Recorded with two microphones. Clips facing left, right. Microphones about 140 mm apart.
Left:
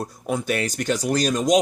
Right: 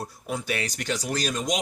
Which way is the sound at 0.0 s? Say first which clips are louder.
Left 6 dB; 45° left (ahead or behind).